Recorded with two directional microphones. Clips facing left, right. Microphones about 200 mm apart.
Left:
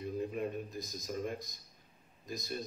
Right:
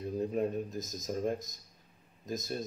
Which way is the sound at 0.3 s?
40° right (ahead or behind).